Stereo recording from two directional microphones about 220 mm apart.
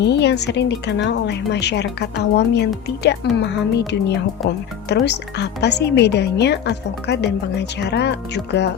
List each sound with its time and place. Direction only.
0.0 s a woman's voice: 50° left (ahead or behind)
4.4 s speech: centre (ahead or behind)
4.9 s a woman's voice: 50° left (ahead or behind)